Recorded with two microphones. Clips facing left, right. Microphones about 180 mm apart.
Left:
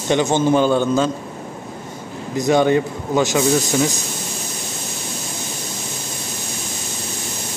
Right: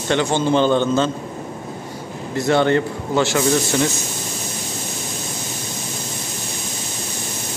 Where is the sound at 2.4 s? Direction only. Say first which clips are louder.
Left 1 dB; 15° left (ahead or behind).